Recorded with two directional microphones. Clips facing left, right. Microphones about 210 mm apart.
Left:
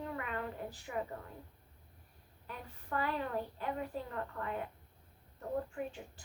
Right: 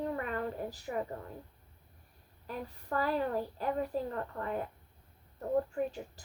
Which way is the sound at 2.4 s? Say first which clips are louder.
Right 7 dB; 40° right (ahead or behind).